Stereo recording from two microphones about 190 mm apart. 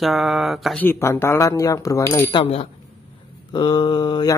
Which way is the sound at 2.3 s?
30° left (ahead or behind).